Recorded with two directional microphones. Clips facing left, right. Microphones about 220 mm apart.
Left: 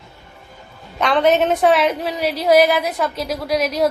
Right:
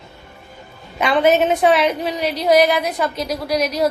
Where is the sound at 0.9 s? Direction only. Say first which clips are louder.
Even; 5° right (ahead or behind).